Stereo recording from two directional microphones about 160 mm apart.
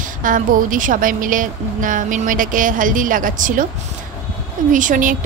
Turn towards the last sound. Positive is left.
turn(degrees=-55)  # may be behind; listen again after turning